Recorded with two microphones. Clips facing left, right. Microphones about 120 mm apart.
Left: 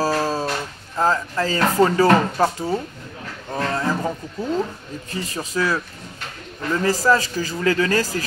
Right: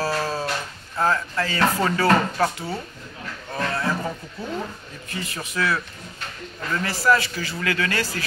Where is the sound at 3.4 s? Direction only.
15° left (ahead or behind).